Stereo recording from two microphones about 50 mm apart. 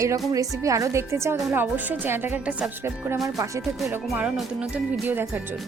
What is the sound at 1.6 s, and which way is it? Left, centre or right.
Speech, right.